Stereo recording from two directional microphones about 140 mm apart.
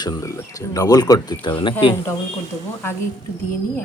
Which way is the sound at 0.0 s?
25° left (ahead or behind).